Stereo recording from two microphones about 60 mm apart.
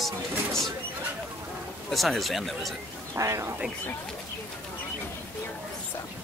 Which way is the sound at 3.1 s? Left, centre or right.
Right.